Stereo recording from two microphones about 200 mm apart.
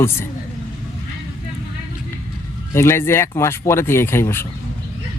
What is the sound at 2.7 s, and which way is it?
Speech, 10° left (ahead or behind).